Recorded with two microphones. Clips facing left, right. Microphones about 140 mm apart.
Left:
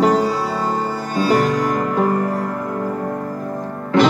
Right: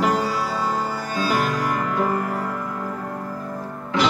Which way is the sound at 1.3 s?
35° left (ahead or behind).